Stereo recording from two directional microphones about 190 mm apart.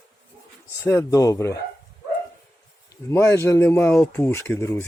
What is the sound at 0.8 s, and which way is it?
Speech, 15° left (ahead or behind).